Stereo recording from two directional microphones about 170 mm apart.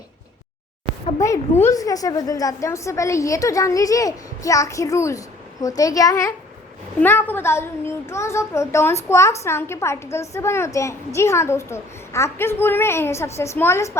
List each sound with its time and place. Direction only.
1.2 s a woman's voice: 15° left (ahead or behind)